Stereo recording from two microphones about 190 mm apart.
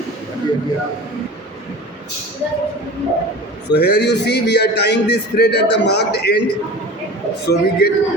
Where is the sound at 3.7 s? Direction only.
60° left (ahead or behind).